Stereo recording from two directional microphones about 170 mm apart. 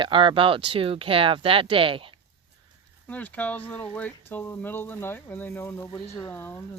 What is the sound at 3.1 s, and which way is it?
Speech, 10° left (ahead or behind).